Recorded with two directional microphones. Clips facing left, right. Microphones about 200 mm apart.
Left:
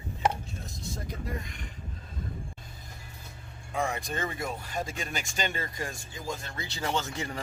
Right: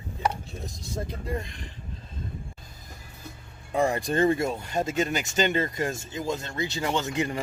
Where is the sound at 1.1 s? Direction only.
30° right (ahead or behind).